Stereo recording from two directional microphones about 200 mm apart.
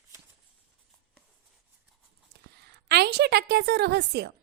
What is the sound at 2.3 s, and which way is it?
A woman's voice, 55° right (ahead or behind).